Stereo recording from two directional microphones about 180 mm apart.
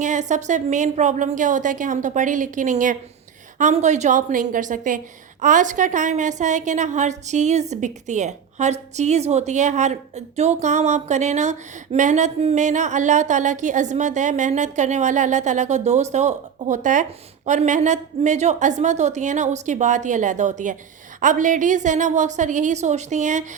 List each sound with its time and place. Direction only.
0.0 s a woman's voice: 40° right (ahead or behind)